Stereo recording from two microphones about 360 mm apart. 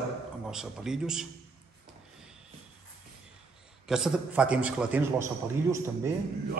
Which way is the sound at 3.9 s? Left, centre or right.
Centre.